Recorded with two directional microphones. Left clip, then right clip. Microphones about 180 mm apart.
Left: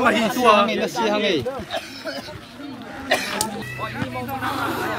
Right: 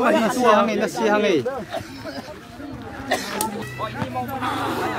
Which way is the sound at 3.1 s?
10° left (ahead or behind).